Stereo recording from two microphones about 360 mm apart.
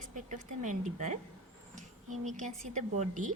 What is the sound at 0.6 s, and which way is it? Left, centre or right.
Speech, right.